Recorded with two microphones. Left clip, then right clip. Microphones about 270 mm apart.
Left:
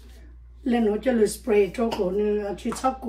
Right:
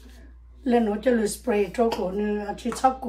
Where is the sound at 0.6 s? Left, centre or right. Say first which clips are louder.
Right 1 dB; centre.